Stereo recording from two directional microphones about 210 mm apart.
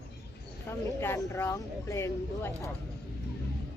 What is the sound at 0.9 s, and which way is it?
Speech, 15° left (ahead or behind).